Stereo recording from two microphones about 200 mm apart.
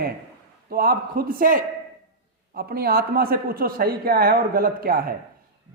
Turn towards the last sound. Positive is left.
turn(degrees=-50)  # may be behind; listen again after turning